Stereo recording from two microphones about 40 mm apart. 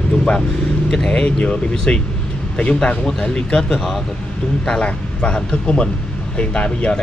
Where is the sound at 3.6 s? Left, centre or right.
Centre.